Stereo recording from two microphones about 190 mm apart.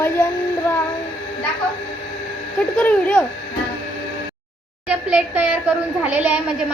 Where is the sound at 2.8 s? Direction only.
10° left (ahead or behind).